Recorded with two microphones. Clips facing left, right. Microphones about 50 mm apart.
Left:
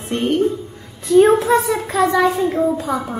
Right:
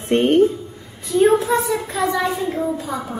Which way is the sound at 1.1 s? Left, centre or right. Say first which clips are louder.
Left 3 dB; left.